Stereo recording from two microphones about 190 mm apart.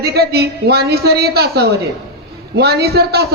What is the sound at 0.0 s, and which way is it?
A man's voice, 55° right (ahead or behind).